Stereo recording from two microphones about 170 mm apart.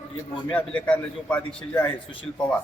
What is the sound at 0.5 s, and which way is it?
A man's voice, 10° left (ahead or behind).